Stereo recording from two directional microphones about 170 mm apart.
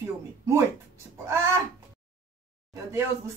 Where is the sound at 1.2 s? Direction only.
15° right (ahead or behind).